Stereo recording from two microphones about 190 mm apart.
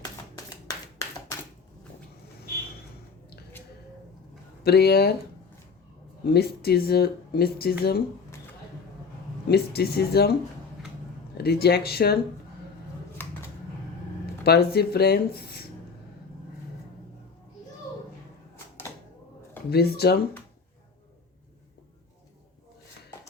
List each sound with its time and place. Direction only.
4.6 s speech: 55° left (ahead or behind)
6.2 s speech: 55° left (ahead or behind)
9.5 s speech: 55° left (ahead or behind)
11.3 s speech: 55° left (ahead or behind)
13.2 s typing: 10° left (ahead or behind)
14.4 s speech: 55° left (ahead or behind)
19.7 s speech: 55° left (ahead or behind)